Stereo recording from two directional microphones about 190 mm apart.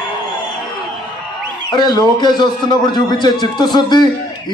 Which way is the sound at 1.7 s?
20° left (ahead or behind).